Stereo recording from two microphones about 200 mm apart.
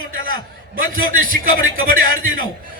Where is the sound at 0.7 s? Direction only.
45° right (ahead or behind).